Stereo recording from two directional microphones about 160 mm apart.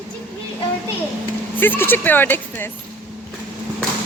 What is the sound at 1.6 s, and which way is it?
Speech, 10° left (ahead or behind).